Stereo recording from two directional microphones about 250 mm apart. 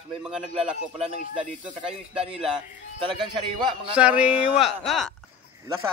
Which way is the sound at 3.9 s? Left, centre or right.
Centre.